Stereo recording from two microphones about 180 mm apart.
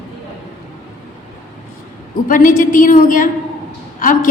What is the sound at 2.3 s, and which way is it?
A woman's voice, 45° left (ahead or behind).